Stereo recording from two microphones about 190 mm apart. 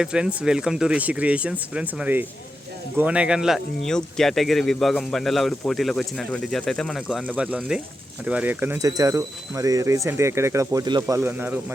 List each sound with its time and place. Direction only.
0.0 s speech: 5° right (ahead or behind)